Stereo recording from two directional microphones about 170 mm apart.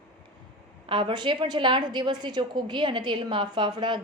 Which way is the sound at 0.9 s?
30° right (ahead or behind).